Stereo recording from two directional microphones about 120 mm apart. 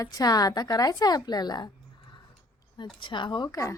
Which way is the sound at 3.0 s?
40° left (ahead or behind).